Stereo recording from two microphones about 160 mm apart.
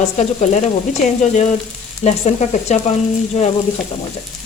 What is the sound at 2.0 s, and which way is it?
Speech, 45° left (ahead or behind).